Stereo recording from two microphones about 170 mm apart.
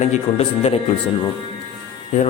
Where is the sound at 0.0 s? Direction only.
40° left (ahead or behind).